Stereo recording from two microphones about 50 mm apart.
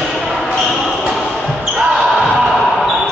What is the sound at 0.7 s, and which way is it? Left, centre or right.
Basketball bounce, centre.